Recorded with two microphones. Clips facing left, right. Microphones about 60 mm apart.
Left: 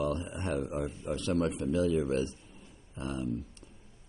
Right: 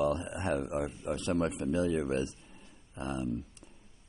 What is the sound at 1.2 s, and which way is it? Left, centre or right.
Speech, right.